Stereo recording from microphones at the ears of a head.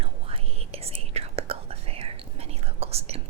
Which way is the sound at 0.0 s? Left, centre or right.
Right.